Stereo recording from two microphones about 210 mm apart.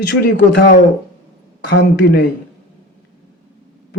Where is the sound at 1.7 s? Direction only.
55° left (ahead or behind).